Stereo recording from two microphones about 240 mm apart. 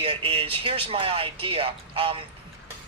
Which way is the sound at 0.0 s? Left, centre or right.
Right.